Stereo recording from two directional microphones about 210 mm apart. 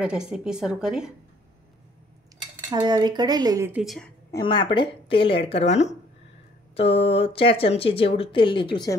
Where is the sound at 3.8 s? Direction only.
Centre (ahead or behind).